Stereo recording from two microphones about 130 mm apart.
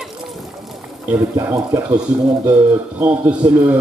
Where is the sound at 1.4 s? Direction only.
25° right (ahead or behind).